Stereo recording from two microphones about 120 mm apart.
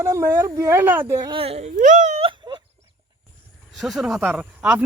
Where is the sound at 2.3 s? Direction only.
40° right (ahead or behind).